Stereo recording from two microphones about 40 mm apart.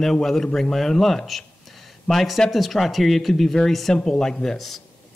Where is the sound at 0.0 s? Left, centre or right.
Centre.